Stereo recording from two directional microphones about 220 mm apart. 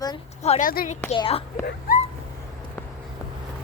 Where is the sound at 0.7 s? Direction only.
40° left (ahead or behind).